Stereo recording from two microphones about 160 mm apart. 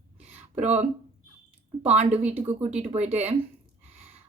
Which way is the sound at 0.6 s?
45° right (ahead or behind).